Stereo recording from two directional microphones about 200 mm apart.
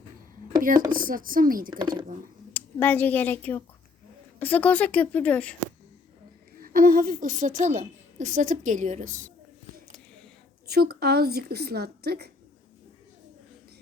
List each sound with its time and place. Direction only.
0.9 s a woman's voice: 45° right (ahead or behind)
1.7 s speech: 25° right (ahead or behind)
2.5 s a woman's voice: 10° left (ahead or behind)
6.6 s a woman's voice: 45° right (ahead or behind)
10.7 s a woman's voice: 50° right (ahead or behind)